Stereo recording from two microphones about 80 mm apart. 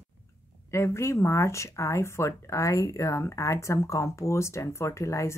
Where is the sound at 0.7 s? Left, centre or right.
Left.